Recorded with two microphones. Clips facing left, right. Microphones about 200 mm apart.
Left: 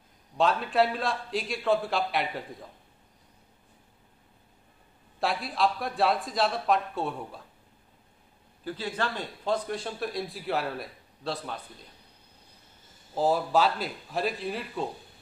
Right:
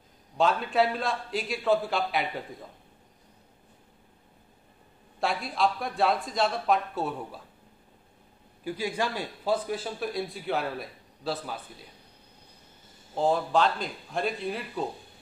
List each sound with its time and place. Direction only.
0.4 s a man's voice: centre (ahead or behind)
5.2 s a man's voice: centre (ahead or behind)
8.6 s a man's voice: 10° right (ahead or behind)
13.1 s a man's voice: 5° left (ahead or behind)